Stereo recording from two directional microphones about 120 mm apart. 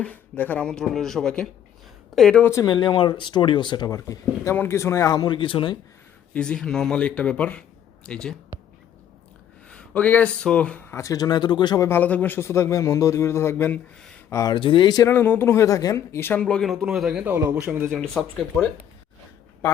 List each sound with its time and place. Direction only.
0.0 s speech: 15° left (ahead or behind)
2.4 s a man's voice: 25° left (ahead or behind)
2.6 s speech: 40° left (ahead or behind)
6.3 s speech: 10° left (ahead or behind)
9.6 s speech: 10° left (ahead or behind); by 11.9 s 35° left (ahead or behind)
11.9 s a man's voice: 15° left (ahead or behind)
14.5 s speech: 45° left (ahead or behind)
15.1 s speech: 20° left (ahead or behind); by 17.3 s 5° right (ahead or behind)
17.3 s a man's voice: 20° right (ahead or behind)
17.9 s speech: centre (ahead or behind)